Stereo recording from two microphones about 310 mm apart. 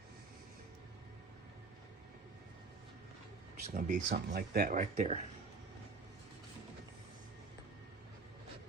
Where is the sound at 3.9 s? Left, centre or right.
Right.